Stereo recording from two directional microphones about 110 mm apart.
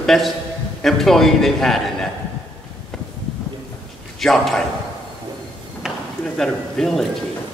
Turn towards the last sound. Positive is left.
turn(degrees=5)  # may be behind; listen again after turning